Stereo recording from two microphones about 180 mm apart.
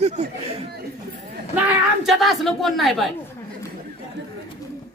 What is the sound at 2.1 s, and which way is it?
Speech, centre (ahead or behind).